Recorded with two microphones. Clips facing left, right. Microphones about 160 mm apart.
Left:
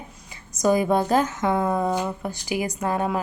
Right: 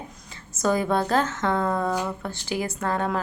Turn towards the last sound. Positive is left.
turn(degrees=10)  # may be behind; listen again after turning